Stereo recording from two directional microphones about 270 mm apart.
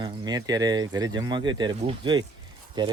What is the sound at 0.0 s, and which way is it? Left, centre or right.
Speech, centre.